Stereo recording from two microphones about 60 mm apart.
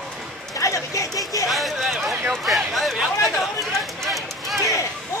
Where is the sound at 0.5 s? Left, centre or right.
Left.